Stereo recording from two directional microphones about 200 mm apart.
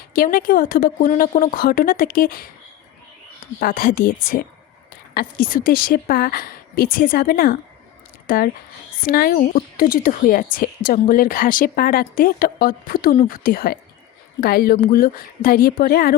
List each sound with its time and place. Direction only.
0.1 s speech: 45° left (ahead or behind)
3.6 s speech: 45° left (ahead or behind)